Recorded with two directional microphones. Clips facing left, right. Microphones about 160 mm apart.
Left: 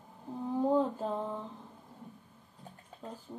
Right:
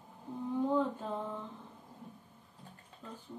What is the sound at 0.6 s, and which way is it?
Speech, 35° left (ahead or behind).